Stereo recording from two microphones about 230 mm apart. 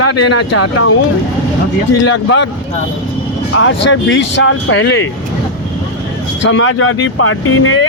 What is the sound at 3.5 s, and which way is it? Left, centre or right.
Speech, left.